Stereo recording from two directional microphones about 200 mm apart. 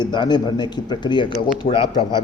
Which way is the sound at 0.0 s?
20° left (ahead or behind).